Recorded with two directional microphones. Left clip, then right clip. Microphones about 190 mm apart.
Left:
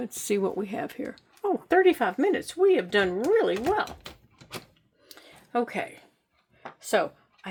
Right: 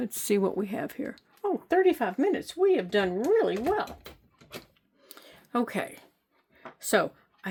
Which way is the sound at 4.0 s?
50° left (ahead or behind).